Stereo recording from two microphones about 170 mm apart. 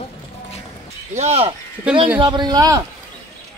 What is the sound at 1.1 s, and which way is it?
Speech, 40° right (ahead or behind).